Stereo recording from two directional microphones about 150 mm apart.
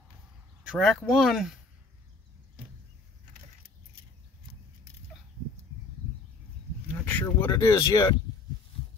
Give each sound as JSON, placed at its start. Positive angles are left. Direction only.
{"t": 0.7, "sound": "speech", "side_deg": 0}
{"t": 6.9, "sound": "a sound", "side_deg": 10}
{"t": 7.5, "sound": "speech", "side_deg": 25}